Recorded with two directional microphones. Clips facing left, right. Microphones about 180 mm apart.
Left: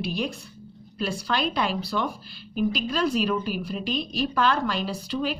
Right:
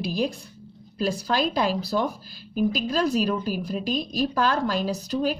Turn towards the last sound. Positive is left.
turn(degrees=-40)  # may be behind; listen again after turning